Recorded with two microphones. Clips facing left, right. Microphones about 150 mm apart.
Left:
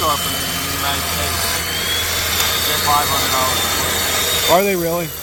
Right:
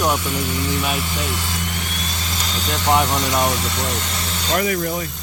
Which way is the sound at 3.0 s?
85° left.